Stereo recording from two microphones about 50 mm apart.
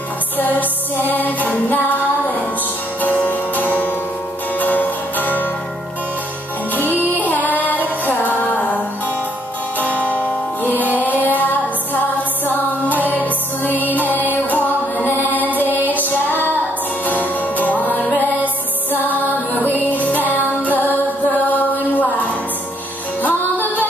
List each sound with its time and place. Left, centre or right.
0.4 s music: left
6.7 s music: left
9.8 s music: left
16.1 s female singing: left
17.0 s music: left
23.2 s music: left